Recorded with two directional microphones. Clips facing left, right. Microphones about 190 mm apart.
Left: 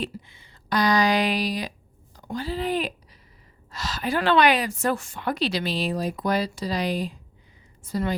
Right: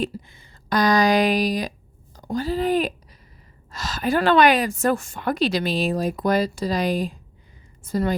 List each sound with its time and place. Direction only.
0.0 s a woman's voice: 45° right (ahead or behind)